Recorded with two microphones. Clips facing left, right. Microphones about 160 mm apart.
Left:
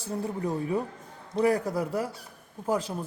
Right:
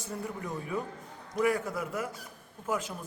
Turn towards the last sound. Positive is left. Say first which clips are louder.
# left 5 dB
turn(degrees=35)  # may be behind; listen again after turning